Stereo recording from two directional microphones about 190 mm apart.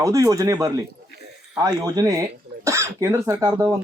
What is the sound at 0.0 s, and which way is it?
Speech, 15° right (ahead or behind).